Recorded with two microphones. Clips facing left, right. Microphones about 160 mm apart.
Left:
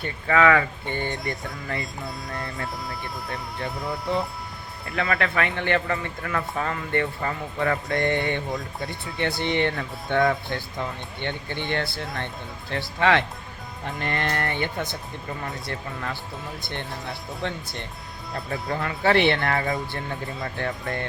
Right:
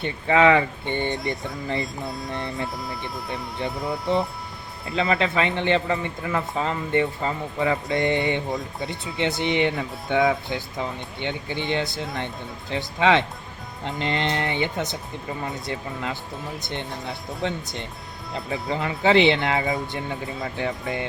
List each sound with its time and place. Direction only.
0.0 s a man's voice: 25° right (ahead or behind)
2.0 s speech: centre (ahead or behind)
2.3 s a man's voice: 20° right (ahead or behind)
3.7 s speech: centre (ahead or behind)
4.9 s a man's voice: 20° right (ahead or behind)